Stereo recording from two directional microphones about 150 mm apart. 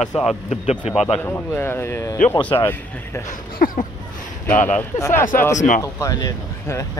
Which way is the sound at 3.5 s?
65° left (ahead or behind).